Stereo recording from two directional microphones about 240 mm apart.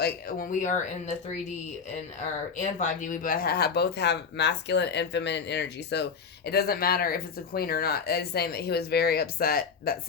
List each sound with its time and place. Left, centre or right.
0.0 s speech: left
2.6 s speech: left